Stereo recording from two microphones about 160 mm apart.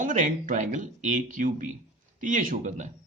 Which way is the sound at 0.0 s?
55° right (ahead or behind).